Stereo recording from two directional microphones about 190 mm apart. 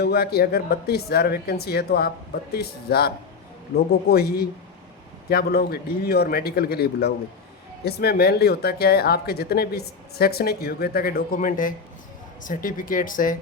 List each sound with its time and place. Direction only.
0.0 s speech: 55° left (ahead or behind)